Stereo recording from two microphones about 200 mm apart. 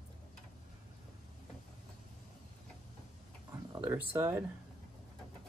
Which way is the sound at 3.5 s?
15° right (ahead or behind).